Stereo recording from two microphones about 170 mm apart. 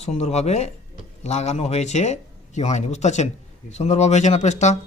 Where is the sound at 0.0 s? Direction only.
40° left (ahead or behind).